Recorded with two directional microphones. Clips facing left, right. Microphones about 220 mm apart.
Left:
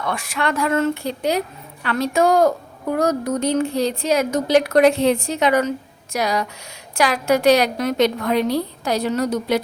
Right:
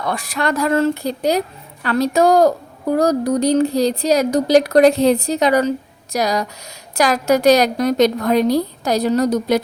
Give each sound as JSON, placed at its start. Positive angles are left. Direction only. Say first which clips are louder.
{"t": 0.0, "sound": "a woman's voice", "louder": "right 2 dB", "side_deg": -35}